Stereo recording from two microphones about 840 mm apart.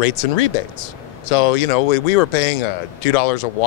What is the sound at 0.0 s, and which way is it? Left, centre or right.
Speech, left.